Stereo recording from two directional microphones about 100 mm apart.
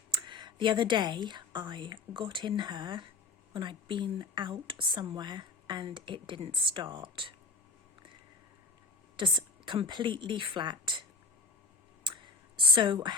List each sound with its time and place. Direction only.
0.1 s speech: 55° right (ahead or behind)
9.1 s speech: 50° right (ahead or behind)
12.0 s a sound: 55° right (ahead or behind)